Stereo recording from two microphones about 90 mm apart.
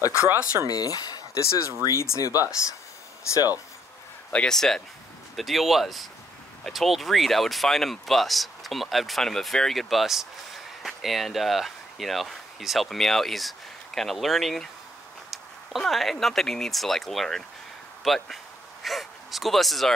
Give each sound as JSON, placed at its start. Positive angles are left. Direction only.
{"t": 0.7, "sound": "speech", "side_deg": 45}
{"t": 4.3, "sound": "speech", "side_deg": 10}